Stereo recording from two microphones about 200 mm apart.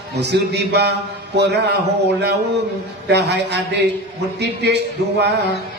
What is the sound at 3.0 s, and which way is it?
A man's voice, 60° right (ahead or behind).